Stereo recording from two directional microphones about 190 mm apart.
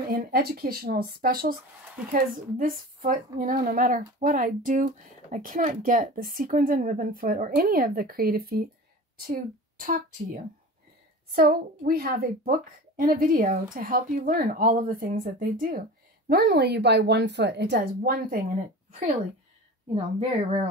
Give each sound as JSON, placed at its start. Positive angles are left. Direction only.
{"t": 0.1, "sound": "a woman's voice", "side_deg": -55}